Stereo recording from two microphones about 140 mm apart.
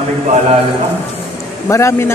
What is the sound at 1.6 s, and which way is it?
Speech, 20° left (ahead or behind).